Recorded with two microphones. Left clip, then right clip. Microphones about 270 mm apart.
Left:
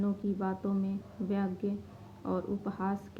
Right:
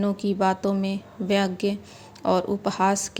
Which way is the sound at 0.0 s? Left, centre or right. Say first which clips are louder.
Right 12 dB; right.